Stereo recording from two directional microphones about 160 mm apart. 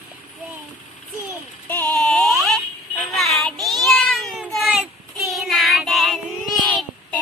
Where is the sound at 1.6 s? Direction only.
15° left (ahead or behind).